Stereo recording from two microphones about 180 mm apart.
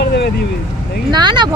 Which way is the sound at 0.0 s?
65° left (ahead or behind).